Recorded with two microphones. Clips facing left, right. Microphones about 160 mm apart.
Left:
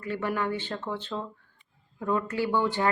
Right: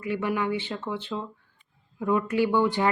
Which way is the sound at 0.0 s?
10° right (ahead or behind).